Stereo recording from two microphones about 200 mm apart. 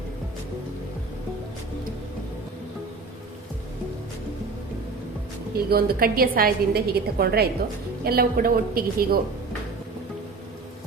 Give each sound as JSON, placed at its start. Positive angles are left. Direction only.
{"t": 5.5, "sound": "a woman's voice", "side_deg": -50}